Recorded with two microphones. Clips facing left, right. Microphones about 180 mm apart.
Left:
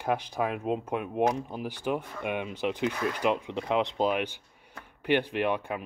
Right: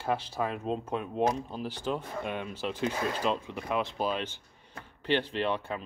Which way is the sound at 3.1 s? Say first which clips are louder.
Left 3 dB; 15° left (ahead or behind).